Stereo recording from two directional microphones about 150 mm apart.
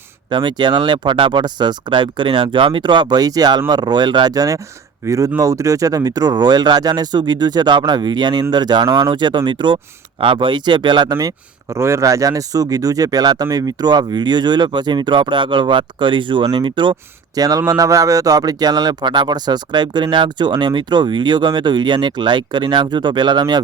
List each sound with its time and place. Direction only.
0.3 s speech: 30° right (ahead or behind)